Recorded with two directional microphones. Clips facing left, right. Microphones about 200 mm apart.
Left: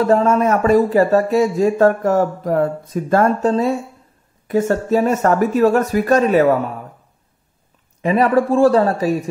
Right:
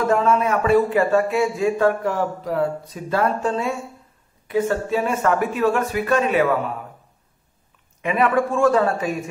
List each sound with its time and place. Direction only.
0.0 s speech: 40° left (ahead or behind)
8.0 s speech: 35° left (ahead or behind)